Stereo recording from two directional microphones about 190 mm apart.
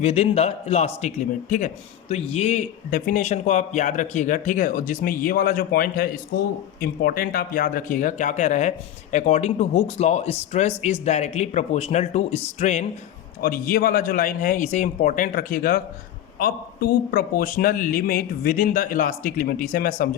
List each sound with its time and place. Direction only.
0.0 s a man's voice: 35° left (ahead or behind)
13.4 s a man's voice: 50° left (ahead or behind)